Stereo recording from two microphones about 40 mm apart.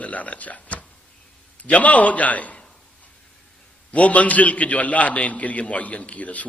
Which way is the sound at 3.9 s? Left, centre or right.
Left.